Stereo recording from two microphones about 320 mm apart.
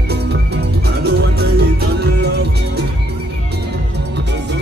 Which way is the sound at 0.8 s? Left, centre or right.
Right.